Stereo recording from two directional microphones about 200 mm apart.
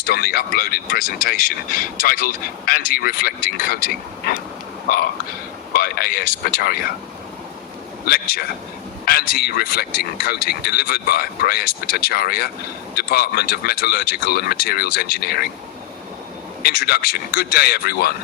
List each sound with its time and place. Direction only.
0.0 s speech: 50° left (ahead or behind)
5.7 s speech: 45° left (ahead or behind)
8.0 s speech: 50° left (ahead or behind)
16.6 s speech: 50° left (ahead or behind)